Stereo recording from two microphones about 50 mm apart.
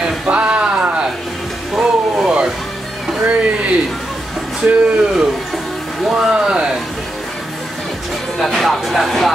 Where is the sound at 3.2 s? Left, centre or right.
Right.